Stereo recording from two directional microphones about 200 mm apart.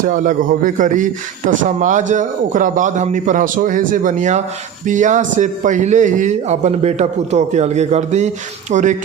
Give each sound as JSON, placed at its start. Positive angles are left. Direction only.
{"t": 0.0, "sound": "speech", "side_deg": -40}